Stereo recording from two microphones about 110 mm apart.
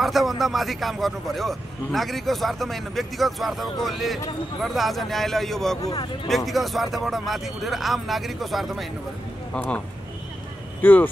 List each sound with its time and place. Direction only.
0.0 s a man's voice: centre (ahead or behind)
9.5 s speech: 10° left (ahead or behind)
10.8 s speech: 15° left (ahead or behind)